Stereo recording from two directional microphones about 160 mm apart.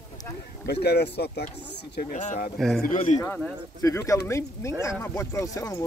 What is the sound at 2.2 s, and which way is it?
Speech, 50° left (ahead or behind).